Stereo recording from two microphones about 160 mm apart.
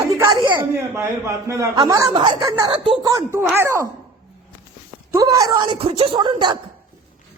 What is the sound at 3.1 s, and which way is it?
Speech, 20° right (ahead or behind).